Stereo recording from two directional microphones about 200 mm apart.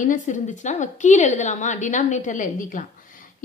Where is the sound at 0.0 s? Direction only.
40° left (ahead or behind).